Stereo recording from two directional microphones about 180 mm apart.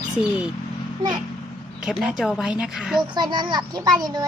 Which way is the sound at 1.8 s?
5° right (ahead or behind).